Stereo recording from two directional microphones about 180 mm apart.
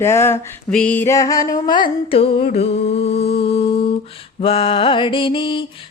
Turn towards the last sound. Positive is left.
turn(degrees=30)  # may be behind; listen again after turning